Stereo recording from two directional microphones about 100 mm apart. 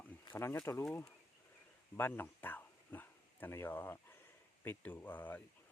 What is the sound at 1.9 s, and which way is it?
Dog, 20° left (ahead or behind).